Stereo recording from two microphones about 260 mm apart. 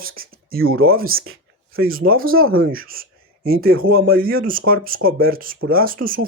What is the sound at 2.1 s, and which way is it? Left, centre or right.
Speech, right.